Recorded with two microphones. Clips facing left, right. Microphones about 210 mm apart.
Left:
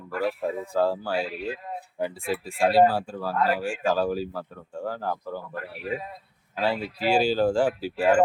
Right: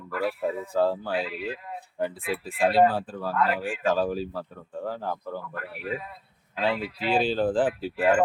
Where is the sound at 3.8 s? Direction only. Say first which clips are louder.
Right 1 dB; centre (ahead or behind).